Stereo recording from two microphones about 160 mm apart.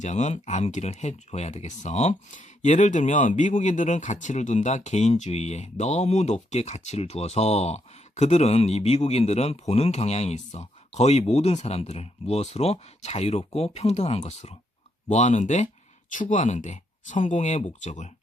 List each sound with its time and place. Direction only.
0.0 s speech: 45° left (ahead or behind)